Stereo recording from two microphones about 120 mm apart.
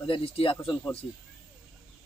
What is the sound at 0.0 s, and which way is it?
Speech, 45° left (ahead or behind).